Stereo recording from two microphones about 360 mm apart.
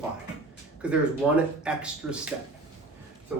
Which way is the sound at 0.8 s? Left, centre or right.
Centre.